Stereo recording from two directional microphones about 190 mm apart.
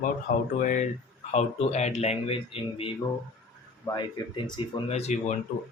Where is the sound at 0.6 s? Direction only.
45° left (ahead or behind).